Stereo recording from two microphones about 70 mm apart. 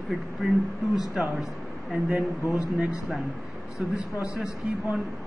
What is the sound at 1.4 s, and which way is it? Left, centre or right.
Speech, centre.